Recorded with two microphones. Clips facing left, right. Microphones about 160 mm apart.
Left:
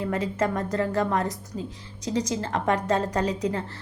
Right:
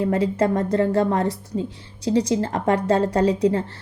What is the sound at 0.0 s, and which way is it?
A woman's voice, 30° right (ahead or behind).